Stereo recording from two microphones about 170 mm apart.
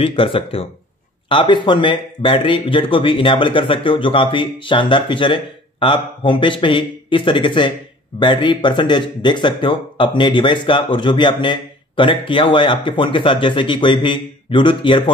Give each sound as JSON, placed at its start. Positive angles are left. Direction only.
{"t": 0.0, "sound": "speech", "side_deg": 30}